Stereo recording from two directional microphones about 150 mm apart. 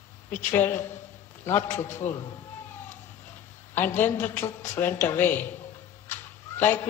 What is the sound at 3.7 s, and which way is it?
A woman's voice, 15° left (ahead or behind).